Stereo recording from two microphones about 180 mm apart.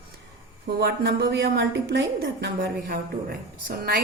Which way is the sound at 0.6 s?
65° right (ahead or behind).